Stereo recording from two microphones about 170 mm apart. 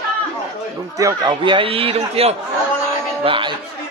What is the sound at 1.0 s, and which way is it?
Speech, 25° right (ahead or behind).